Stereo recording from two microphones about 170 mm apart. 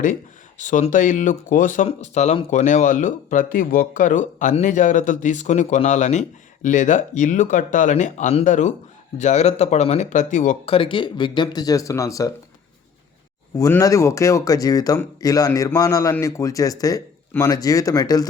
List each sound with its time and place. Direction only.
0.6 s speech: 50° left (ahead or behind)
2.5 s speech: 50° left (ahead or behind)
10.8 s speech: 30° left (ahead or behind)
13.6 s speech: 20° left (ahead or behind)